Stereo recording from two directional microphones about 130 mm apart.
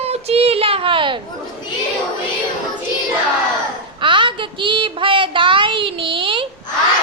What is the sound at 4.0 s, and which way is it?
Child singing, 40° right (ahead or behind).